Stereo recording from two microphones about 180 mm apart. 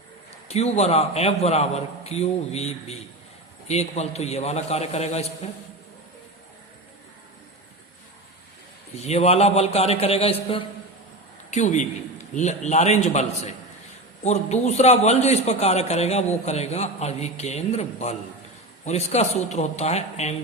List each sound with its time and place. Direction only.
0.4 s a man's voice: 35° left (ahead or behind)
9.0 s a man's voice: 35° left (ahead or behind)
11.5 s a man's voice: 45° left (ahead or behind)